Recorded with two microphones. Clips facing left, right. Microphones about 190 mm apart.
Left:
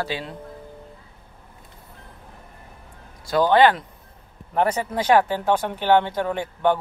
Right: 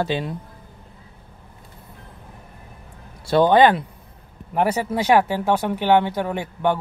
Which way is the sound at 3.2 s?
30° right (ahead or behind).